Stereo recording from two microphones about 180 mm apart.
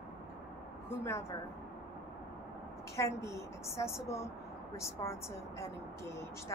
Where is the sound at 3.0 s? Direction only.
15° left (ahead or behind).